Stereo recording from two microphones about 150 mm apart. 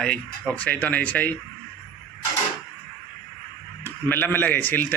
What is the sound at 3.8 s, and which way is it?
A man's voice, 15° left (ahead or behind).